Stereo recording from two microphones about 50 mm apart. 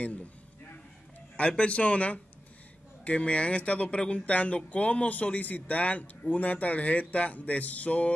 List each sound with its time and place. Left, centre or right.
1.6 s speech: left